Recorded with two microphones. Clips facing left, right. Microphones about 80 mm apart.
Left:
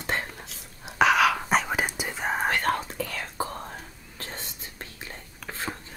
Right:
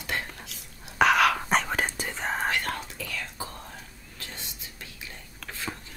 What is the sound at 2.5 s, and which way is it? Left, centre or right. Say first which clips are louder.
Whispering: left 5 dB; left.